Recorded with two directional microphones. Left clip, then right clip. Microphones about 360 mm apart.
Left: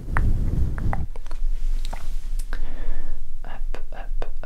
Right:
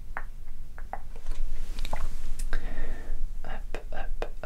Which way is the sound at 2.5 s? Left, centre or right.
Centre.